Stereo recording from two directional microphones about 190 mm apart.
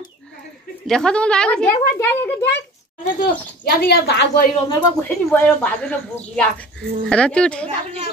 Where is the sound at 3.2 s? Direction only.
55° left (ahead or behind).